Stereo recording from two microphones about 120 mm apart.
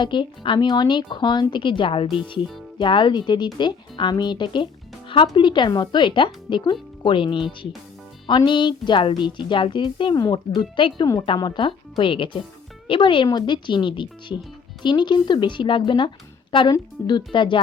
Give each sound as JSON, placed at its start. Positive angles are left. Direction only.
{"t": 0.0, "sound": "a woman's voice", "side_deg": 40}